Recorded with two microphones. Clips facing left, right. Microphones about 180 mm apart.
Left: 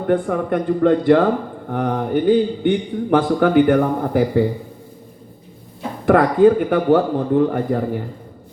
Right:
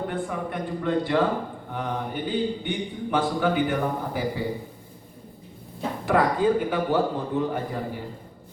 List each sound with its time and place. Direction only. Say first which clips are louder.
0.1 s speech: left 11 dB; 55° left (ahead or behind)
6.1 s speech: left 9 dB; 55° left (ahead or behind)